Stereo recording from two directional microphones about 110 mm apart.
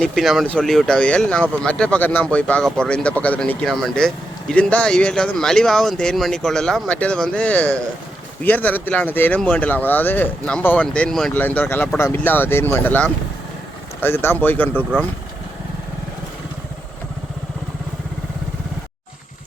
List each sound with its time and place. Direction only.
0.0 s speech: centre (ahead or behind)
3.7 s speech: centre (ahead or behind); by 14.8 s 20° left (ahead or behind)